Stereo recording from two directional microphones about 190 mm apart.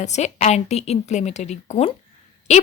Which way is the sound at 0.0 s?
35° left (ahead or behind).